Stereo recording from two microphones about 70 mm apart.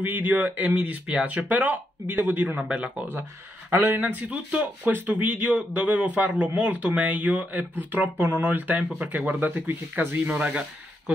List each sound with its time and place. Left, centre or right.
0.0 s speech: right